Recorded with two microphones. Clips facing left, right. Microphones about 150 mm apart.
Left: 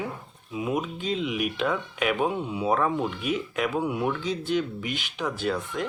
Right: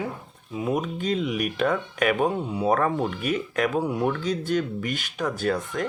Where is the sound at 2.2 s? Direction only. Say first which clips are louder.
Right 2 dB; 40° right (ahead or behind).